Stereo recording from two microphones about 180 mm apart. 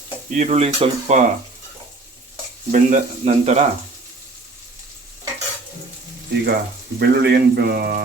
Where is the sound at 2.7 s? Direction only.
40° right (ahead or behind).